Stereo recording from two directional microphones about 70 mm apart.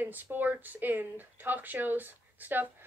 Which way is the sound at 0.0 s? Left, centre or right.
Right.